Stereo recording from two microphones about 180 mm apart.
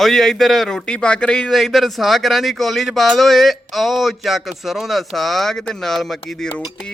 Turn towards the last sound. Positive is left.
turn(degrees=5)  # may be behind; listen again after turning